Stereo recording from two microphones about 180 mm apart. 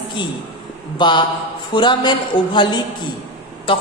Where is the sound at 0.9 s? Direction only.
25° left (ahead or behind).